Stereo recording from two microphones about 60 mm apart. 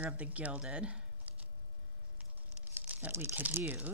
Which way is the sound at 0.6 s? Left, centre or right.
Centre.